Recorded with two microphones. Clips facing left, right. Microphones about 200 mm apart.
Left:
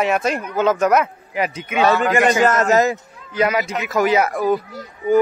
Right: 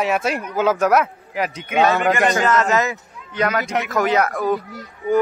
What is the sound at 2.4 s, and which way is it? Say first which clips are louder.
Speech: left 3 dB; 45° left (ahead or behind).